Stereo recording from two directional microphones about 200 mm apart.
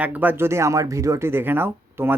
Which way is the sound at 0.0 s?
10° right (ahead or behind).